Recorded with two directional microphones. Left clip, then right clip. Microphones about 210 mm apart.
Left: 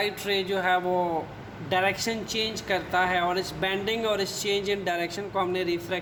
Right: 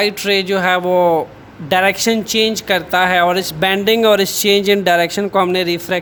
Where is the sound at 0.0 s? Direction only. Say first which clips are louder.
Right 12 dB; 45° right (ahead or behind).